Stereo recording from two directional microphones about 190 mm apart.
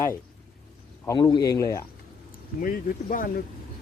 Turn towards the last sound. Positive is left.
turn(degrees=45)  # may be behind; listen again after turning